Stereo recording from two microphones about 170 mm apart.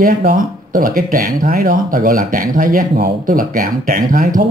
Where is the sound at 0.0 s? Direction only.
55° right (ahead or behind).